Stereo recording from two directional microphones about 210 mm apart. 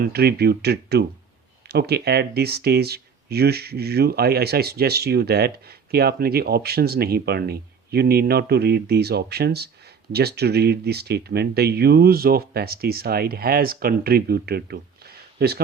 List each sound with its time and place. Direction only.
0.0 s speech: 50° right (ahead or behind)